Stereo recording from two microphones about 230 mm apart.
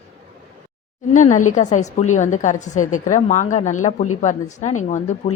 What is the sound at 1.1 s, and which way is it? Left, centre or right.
A woman's voice, left.